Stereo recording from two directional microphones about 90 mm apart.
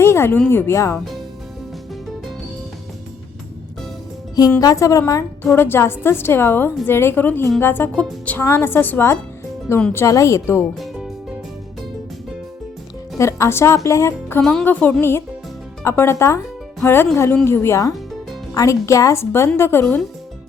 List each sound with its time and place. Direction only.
0.0 s a woman's voice: 30° left (ahead or behind)
4.6 s speech: 40° left (ahead or behind)
5.4 s a woman's voice: 25° left (ahead or behind)
8.4 s a woman's voice: 30° left (ahead or behind)
10.8 s music: centre (ahead or behind)
13.1 s a woman's voice: 35° left (ahead or behind)
15.8 s a woman's voice: 30° left (ahead or behind)